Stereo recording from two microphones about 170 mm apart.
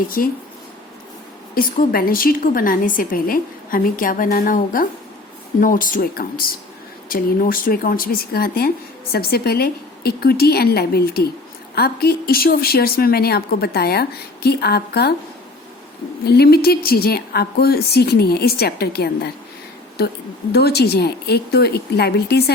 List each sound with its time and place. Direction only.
0.2 s speech: 55° left (ahead or behind)
1.5 s speech: 60° left (ahead or behind)
16.2 s a woman's voice: 70° left (ahead or behind)
20.5 s a woman's voice: 70° left (ahead or behind)